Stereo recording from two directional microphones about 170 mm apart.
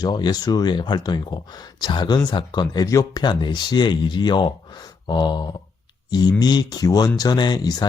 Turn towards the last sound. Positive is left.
turn(degrees=25)  # may be behind; listen again after turning